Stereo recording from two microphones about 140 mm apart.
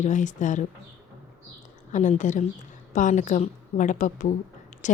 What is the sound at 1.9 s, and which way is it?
A woman's voice, 60° left (ahead or behind).